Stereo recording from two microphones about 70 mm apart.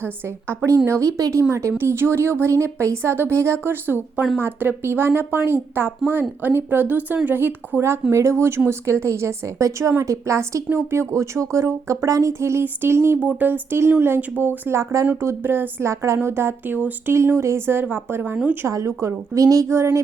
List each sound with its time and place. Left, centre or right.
0.0 s a woman's voice: right
0.9 s a woman's voice: right
13.1 s a woman's voice: right
17.2 s a woman's voice: right
18.7 s speech: right